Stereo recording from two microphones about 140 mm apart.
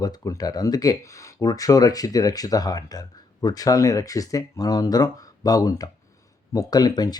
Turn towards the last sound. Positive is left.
turn(degrees=30)  # may be behind; listen again after turning